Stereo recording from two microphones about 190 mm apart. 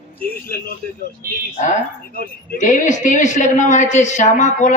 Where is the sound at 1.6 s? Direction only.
40° left (ahead or behind).